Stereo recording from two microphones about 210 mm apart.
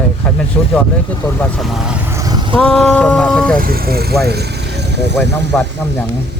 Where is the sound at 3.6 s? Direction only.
45° right (ahead or behind).